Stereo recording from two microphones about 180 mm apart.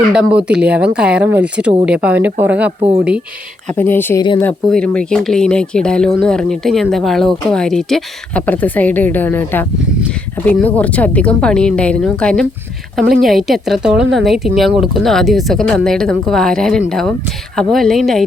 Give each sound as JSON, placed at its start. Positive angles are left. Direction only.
{"t": 0.1, "sound": "speech", "side_deg": -5}
{"t": 3.8, "sound": "speech", "side_deg": 10}